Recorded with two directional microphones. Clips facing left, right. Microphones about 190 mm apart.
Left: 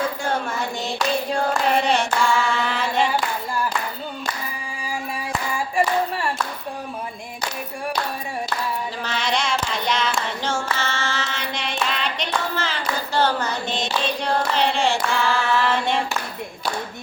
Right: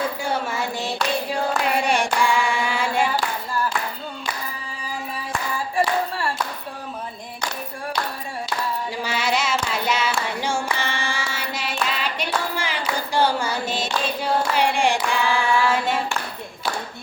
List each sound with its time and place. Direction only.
0.3 s hands: 5° right (ahead or behind)
5.5 s clapping: 15° left (ahead or behind)
9.0 s child singing: 10° right (ahead or behind)
11.9 s clapping: 5° right (ahead or behind)